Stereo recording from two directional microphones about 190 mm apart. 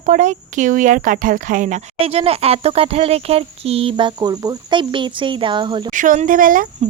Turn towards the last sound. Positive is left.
turn(degrees=-45)  # may be behind; listen again after turning